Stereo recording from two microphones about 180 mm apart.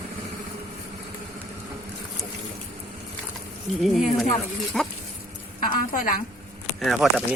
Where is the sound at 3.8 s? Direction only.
Centre (ahead or behind).